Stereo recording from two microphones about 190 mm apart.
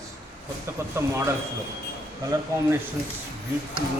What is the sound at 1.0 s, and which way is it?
Speech, 15° right (ahead or behind).